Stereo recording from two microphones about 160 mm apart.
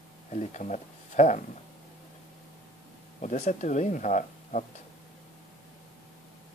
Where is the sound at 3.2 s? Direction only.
50° left (ahead or behind).